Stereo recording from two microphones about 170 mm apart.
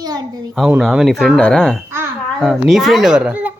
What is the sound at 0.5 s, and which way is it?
A child's voice, 5° right (ahead or behind).